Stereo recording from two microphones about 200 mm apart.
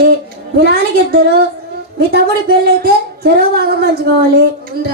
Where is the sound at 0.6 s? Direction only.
50° right (ahead or behind).